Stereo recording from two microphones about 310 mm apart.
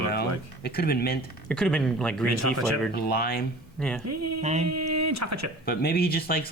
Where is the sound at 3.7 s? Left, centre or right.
Centre.